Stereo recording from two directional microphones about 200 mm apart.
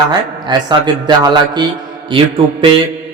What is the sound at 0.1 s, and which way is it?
Speech, 20° right (ahead or behind).